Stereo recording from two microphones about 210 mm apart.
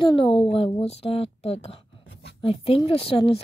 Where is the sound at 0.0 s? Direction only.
25° left (ahead or behind).